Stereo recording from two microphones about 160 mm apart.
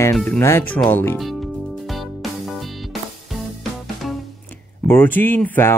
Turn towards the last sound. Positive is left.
turn(degrees=15)  # may be behind; listen again after turning